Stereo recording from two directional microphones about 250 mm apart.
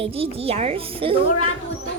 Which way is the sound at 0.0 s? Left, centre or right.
Right.